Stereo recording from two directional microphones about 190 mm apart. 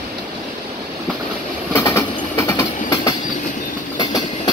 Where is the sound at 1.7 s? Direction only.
15° left (ahead or behind).